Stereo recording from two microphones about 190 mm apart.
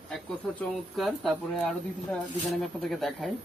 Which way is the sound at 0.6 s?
Centre (ahead or behind).